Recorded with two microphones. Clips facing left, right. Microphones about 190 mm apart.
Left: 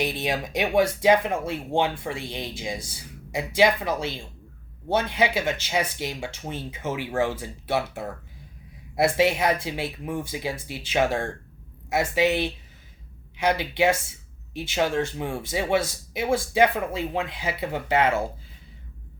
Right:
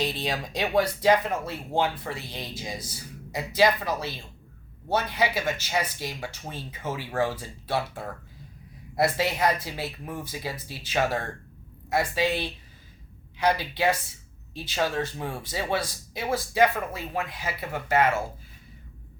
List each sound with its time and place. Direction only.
0.0 s speech: 15° left (ahead or behind)